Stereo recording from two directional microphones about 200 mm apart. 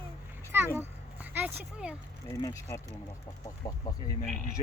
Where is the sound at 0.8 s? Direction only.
10° right (ahead or behind).